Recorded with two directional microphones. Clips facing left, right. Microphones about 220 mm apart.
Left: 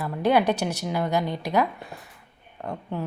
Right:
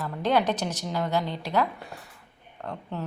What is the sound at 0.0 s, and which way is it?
A woman's voice, 10° left (ahead or behind).